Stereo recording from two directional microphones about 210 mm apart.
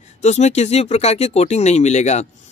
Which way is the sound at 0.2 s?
30° left (ahead or behind).